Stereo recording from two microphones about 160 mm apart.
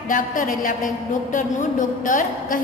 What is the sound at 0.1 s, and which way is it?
A woman's voice, 55° left (ahead or behind).